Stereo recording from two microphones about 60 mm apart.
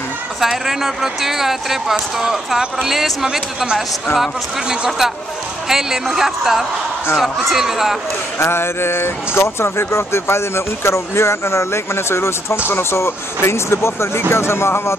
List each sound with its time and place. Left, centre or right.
0.4 s speech: centre
8.4 s speech: left